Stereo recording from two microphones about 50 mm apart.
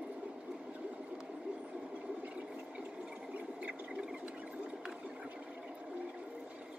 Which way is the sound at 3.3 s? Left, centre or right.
Right.